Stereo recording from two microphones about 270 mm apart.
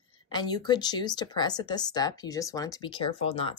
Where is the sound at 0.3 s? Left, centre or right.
Centre.